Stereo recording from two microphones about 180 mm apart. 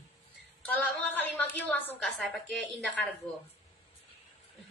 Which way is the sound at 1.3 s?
10° left (ahead or behind).